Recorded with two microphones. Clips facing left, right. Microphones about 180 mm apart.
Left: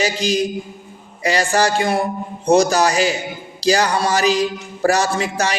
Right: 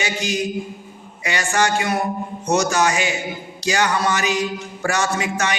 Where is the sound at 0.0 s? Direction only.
35° left (ahead or behind).